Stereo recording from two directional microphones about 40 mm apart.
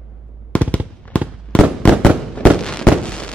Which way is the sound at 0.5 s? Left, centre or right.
Left.